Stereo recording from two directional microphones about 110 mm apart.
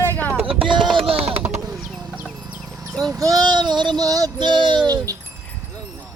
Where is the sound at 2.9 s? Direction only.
5° left (ahead or behind).